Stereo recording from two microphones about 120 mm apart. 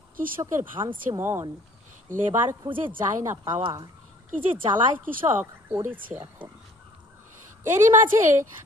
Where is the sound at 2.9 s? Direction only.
20° right (ahead or behind).